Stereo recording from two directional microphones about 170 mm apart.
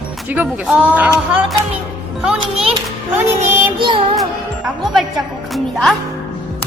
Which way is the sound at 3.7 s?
30° right (ahead or behind).